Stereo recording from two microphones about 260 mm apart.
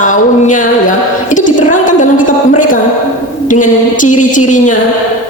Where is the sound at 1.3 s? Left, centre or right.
Left.